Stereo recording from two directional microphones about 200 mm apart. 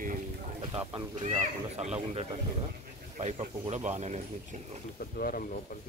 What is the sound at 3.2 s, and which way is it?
A man's voice, 30° right (ahead or behind).